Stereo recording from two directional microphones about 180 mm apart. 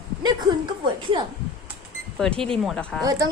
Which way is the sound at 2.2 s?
5° left (ahead or behind).